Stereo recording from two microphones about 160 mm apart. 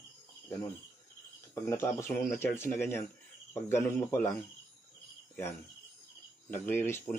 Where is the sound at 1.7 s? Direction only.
15° left (ahead or behind).